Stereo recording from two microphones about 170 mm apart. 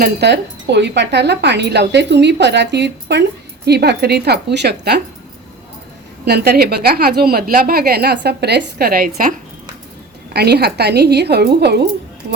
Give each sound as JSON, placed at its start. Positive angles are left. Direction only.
{"t": 0.0, "sound": "a woman's voice", "side_deg": -80}
{"t": 3.7, "sound": "a woman's voice", "side_deg": -75}
{"t": 6.2, "sound": "a woman's voice", "side_deg": -70}
{"t": 10.3, "sound": "a woman's voice", "side_deg": -70}